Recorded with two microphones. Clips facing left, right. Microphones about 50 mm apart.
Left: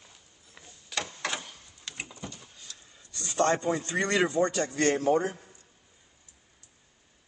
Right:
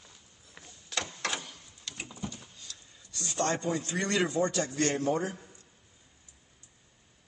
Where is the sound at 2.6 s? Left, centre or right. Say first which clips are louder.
Even; left.